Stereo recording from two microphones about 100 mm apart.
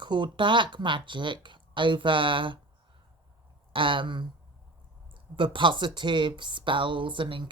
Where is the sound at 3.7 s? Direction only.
55° right (ahead or behind).